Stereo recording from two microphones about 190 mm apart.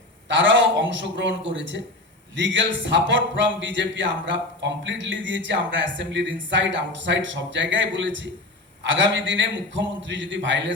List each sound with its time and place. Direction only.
0.3 s a man's voice: 75° right (ahead or behind)